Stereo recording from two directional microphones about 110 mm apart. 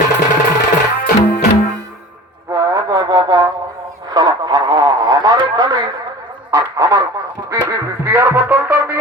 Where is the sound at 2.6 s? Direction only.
35° right (ahead or behind).